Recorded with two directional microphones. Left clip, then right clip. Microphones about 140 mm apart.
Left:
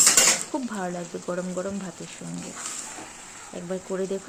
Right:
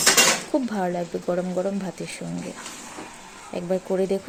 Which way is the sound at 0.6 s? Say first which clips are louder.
Right 5 dB; 35° right (ahead or behind).